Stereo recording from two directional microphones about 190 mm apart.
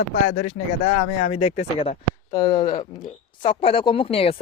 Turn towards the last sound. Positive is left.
turn(degrees=30)  # may be behind; listen again after turning